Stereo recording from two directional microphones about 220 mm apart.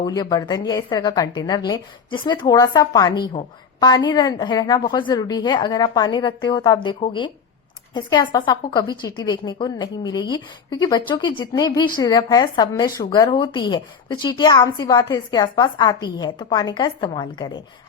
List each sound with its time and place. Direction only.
0.0 s a woman's voice: 15° left (ahead or behind)